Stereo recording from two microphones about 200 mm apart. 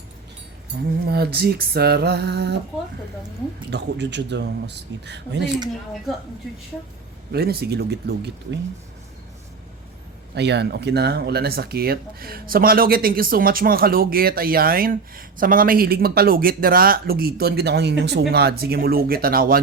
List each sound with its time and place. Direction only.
1.0 s speech: 50° right (ahead or behind)
3.7 s speech: 60° right (ahead or behind)
7.3 s speech: 50° right (ahead or behind)
10.3 s speech: 60° right (ahead or behind)